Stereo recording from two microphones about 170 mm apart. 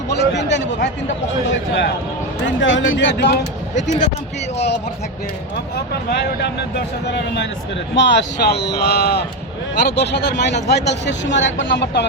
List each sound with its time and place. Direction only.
0.1 s a sound: 85° left
2.5 s speech: 90° left
4.5 s speech: 80° left